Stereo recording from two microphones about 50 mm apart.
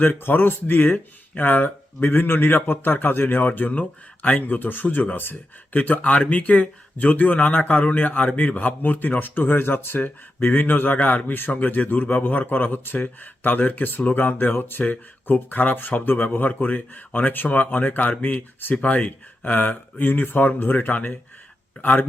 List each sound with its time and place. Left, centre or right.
0.0 s a man's voice: left